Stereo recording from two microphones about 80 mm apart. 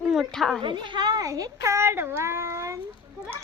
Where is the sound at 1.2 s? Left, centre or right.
Right.